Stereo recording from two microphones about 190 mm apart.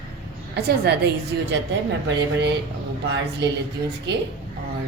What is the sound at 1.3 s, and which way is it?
Speech, 65° right (ahead or behind).